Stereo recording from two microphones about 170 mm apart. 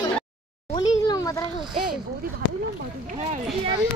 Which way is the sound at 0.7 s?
25° left (ahead or behind).